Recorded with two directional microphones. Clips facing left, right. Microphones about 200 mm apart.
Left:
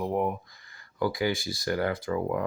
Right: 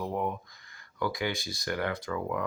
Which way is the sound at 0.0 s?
25° left (ahead or behind).